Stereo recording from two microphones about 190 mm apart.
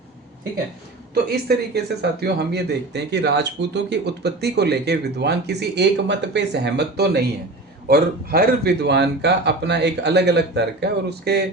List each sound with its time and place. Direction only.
1.1 s speech: 55° right (ahead or behind)